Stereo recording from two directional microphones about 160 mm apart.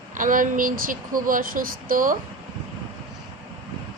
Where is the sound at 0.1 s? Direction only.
55° right (ahead or behind).